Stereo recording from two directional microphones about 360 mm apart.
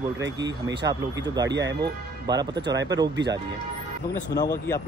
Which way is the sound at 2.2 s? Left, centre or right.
Centre.